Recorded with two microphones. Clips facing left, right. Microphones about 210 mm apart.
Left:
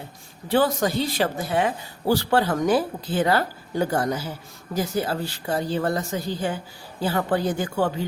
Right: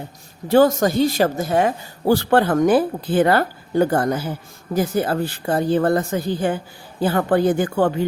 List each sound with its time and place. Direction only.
0.4 s a woman's voice: 45° right (ahead or behind)